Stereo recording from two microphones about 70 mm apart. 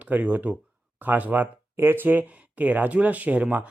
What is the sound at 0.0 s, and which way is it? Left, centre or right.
Speech, right.